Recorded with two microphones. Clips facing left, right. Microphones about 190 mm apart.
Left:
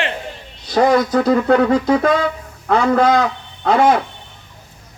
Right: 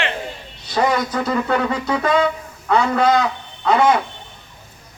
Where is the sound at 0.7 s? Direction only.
50° left (ahead or behind).